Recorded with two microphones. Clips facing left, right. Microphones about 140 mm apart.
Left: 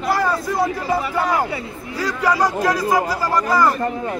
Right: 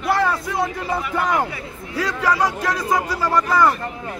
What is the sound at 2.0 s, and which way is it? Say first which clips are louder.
Speech: left 1 dB; centre (ahead or behind).